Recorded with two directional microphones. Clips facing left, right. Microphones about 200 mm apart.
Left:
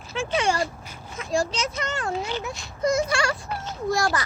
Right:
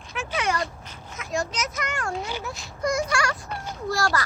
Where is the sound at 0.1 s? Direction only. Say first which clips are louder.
Left 3 dB; 30° left (ahead or behind).